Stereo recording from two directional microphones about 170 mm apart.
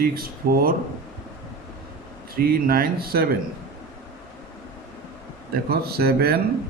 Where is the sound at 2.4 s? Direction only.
60° right (ahead or behind).